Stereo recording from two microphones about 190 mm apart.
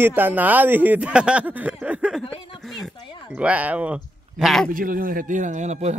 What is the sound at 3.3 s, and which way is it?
Speech, 5° right (ahead or behind).